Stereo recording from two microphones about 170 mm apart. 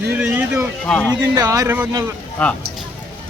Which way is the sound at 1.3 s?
20° right (ahead or behind).